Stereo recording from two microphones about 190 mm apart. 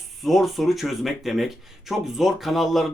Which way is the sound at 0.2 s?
Centre (ahead or behind).